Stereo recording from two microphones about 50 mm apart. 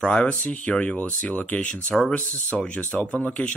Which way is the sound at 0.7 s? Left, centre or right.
Centre.